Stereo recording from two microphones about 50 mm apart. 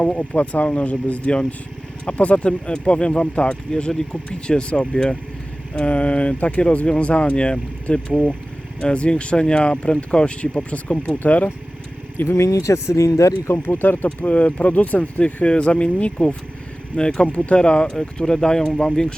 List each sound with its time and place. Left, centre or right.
0.0 s speech: left
12.1 s speech: left
12.4 s speech: left
14.0 s speech: left
14.3 s speech: left